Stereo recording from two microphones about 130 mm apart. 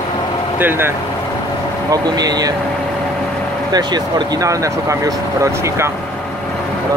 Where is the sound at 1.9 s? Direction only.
30° right (ahead or behind).